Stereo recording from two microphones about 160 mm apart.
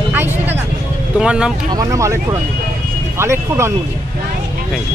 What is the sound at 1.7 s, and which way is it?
Speech, 20° right (ahead or behind).